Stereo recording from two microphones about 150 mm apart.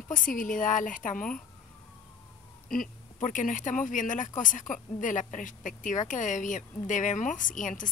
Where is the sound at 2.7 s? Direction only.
60° left (ahead or behind).